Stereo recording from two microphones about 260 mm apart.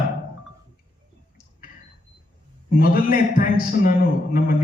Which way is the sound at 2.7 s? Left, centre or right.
Left.